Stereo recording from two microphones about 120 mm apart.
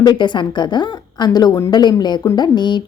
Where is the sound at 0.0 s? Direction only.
40° left (ahead or behind).